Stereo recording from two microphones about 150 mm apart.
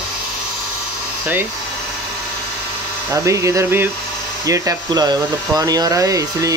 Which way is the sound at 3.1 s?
20° right (ahead or behind).